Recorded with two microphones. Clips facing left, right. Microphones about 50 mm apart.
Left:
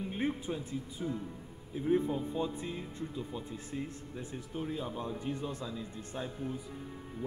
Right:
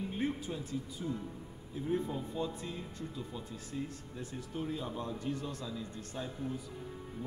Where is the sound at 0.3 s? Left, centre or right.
Centre.